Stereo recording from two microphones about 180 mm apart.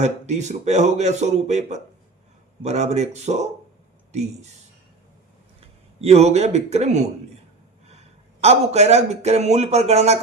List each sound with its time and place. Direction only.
0.0 s speech: 40° right (ahead or behind)
5.5 s speech: 35° right (ahead or behind)